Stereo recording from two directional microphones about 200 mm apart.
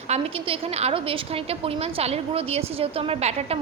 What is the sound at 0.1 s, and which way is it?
A woman's voice, 30° right (ahead or behind).